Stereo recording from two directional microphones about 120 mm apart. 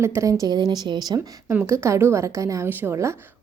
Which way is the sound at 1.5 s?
20° right (ahead or behind).